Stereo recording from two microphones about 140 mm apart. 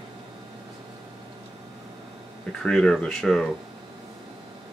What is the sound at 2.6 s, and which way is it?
Speech, 5° left (ahead or behind).